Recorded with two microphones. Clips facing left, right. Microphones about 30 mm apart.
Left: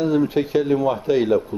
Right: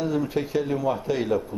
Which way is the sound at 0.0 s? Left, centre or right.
Centre.